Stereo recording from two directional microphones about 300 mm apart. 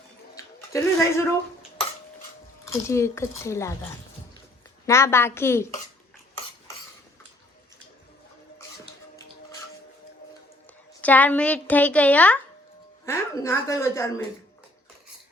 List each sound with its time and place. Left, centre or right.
0.3 s a sound: centre
2.6 s speech: centre
4.9 s speech: centre
11.0 s a woman's voice: centre